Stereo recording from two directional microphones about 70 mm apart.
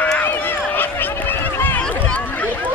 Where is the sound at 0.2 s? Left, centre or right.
Left.